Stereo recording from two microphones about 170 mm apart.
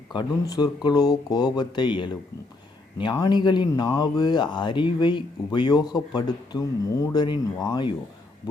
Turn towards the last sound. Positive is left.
turn(degrees=25)  # may be behind; listen again after turning